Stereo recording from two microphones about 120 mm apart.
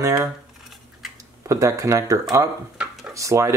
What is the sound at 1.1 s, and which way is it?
Speech, 25° right (ahead or behind).